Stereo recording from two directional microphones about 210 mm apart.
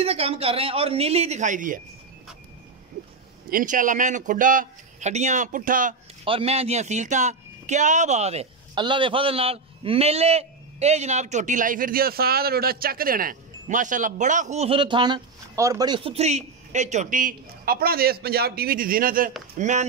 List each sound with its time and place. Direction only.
0.0 s speech: 30° right (ahead or behind)
3.4 s speech: 40° right (ahead or behind)
6.2 s speech: 25° right (ahead or behind)